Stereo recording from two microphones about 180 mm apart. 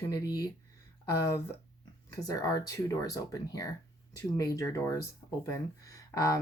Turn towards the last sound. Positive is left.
turn(degrees=20)  # may be behind; listen again after turning